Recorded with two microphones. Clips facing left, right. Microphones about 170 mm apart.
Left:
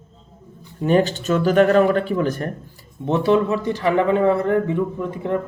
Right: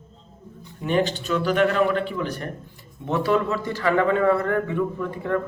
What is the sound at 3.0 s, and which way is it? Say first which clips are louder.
Speech: left 4 dB; 25° left (ahead or behind).